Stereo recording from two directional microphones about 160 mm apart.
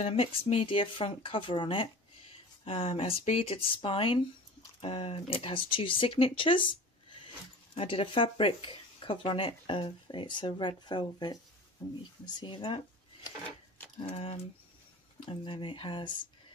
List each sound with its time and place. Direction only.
0.0 s speech: 40° left (ahead or behind)
12.4 s speech: 30° left (ahead or behind)